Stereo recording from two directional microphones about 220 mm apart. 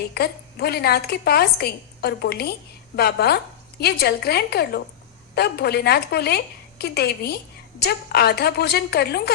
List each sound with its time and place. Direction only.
0.1 s a woman's voice: 45° left (ahead or behind)